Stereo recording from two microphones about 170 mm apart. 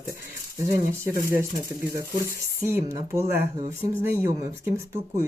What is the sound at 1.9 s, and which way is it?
Speech, 15° right (ahead or behind).